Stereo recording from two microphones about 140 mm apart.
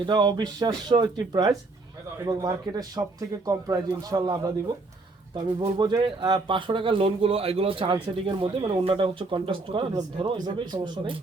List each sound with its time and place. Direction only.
0.0 s speech: 35° right (ahead or behind)